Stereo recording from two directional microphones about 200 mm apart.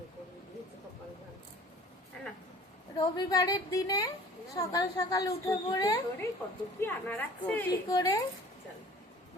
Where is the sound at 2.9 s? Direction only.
20° left (ahead or behind).